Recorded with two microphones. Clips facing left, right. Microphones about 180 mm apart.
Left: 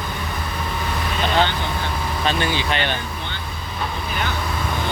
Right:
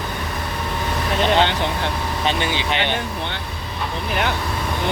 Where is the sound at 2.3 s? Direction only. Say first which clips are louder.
Left 1 dB; 20° right (ahead or behind).